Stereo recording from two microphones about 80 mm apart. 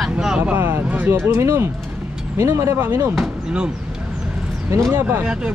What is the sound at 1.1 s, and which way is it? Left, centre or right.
Speech, right.